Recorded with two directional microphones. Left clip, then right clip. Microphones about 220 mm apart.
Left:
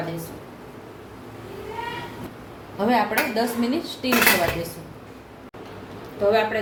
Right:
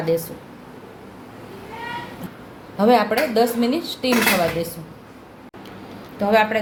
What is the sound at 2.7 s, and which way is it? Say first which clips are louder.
A woman's voice: right 4 dB; 35° right (ahead or behind).